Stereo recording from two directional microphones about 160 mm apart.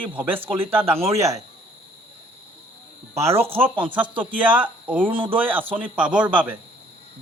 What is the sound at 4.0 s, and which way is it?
A man's voice, 10° right (ahead or behind).